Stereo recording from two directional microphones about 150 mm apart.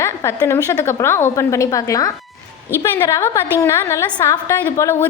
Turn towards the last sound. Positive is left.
turn(degrees=15)  # may be behind; listen again after turning